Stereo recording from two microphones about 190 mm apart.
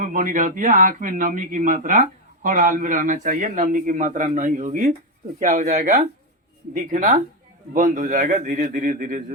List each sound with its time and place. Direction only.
0.0 s speech: 45° right (ahead or behind)